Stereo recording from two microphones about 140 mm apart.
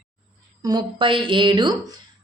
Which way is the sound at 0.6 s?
30° right (ahead or behind).